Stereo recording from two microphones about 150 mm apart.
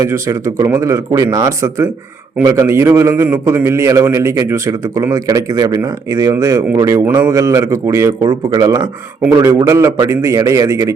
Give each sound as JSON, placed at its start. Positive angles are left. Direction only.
{"t": 0.0, "sound": "a man's voice", "side_deg": -20}